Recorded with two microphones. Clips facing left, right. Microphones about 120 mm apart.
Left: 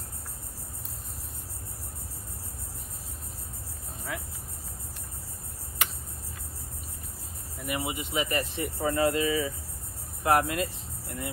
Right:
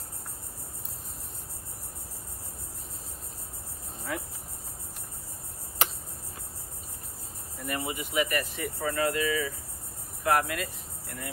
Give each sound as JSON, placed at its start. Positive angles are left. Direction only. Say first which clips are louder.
{"t": 7.6, "sound": "speech", "louder": "left 1 dB", "side_deg": 15}